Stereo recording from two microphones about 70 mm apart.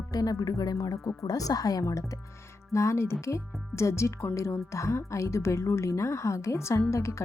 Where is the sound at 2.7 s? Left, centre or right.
Left.